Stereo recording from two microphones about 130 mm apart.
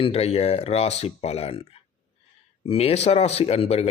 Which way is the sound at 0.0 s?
50° left (ahead or behind).